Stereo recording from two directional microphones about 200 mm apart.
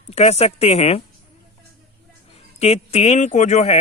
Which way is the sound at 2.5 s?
30° left (ahead or behind).